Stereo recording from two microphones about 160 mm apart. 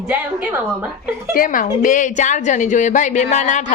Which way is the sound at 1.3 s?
60° left (ahead or behind).